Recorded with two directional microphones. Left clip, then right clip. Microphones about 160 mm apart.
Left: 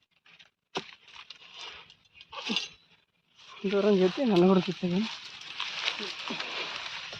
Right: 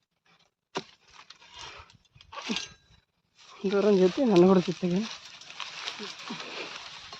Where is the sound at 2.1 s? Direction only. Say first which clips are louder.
Left 2 dB; 20° right (ahead or behind).